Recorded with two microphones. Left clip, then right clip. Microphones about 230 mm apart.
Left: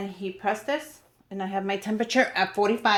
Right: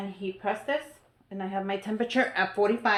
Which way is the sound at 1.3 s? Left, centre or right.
Left.